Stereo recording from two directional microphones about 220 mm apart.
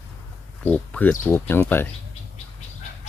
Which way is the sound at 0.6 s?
5° left (ahead or behind).